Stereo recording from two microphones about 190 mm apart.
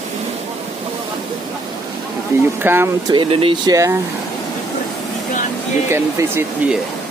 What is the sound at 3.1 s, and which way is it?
Speech, 25° right (ahead or behind).